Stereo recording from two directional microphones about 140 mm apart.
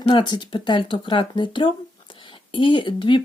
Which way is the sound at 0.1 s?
35° left (ahead or behind).